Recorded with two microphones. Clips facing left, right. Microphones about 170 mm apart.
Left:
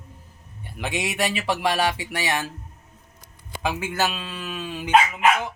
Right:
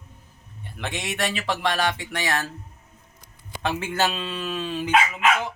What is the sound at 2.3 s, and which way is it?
Speech, 20° left (ahead or behind).